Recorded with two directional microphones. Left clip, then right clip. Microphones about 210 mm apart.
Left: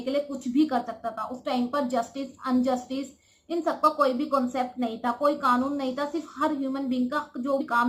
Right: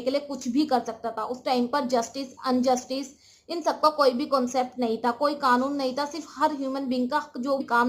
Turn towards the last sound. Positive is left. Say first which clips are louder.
# right 1 dB
turn(degrees=-50)  # may be behind; listen again after turning